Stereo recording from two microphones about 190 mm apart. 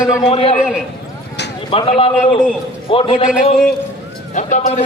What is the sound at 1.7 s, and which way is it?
Speech, 30° left (ahead or behind).